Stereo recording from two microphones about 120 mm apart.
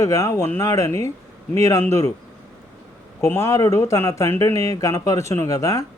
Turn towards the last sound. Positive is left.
turn(degrees=25)  # may be behind; listen again after turning